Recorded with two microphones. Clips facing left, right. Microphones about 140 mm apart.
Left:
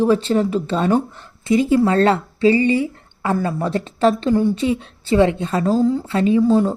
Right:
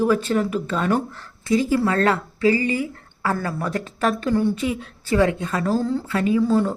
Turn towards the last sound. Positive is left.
turn(degrees=25)  # may be behind; listen again after turning